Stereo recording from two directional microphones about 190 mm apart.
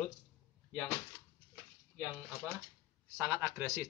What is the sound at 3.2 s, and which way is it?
Speech, 15° right (ahead or behind).